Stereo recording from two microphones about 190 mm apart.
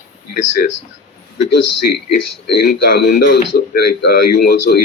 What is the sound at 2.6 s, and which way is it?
Speech, 55° left (ahead or behind).